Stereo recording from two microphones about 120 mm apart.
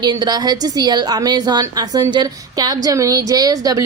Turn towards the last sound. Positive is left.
turn(degrees=-30)  # may be behind; listen again after turning